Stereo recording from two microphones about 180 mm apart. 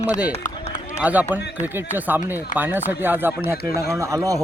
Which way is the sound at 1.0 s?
10° right (ahead or behind).